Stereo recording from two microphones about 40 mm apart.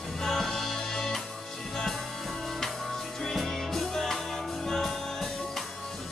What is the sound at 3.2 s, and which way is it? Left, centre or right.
Music, centre.